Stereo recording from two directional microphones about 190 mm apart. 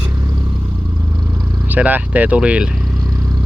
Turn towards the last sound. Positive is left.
turn(degrees=-20)  # may be behind; listen again after turning